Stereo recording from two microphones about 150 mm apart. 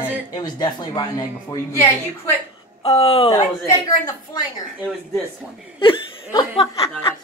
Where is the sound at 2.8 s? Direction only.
45° left (ahead or behind).